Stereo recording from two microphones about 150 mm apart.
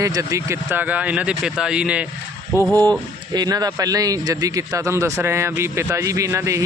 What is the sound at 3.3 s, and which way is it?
Speech, 25° right (ahead or behind).